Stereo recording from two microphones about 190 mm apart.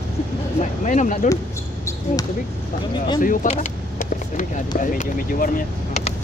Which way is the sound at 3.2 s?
45° left (ahead or behind).